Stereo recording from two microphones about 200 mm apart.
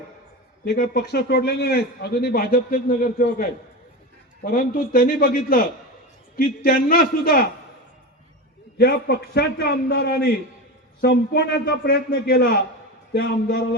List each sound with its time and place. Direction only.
0.6 s a man's voice: 50° left (ahead or behind)
4.4 s a man's voice: 45° left (ahead or behind)
8.8 s a man's voice: 55° left (ahead or behind)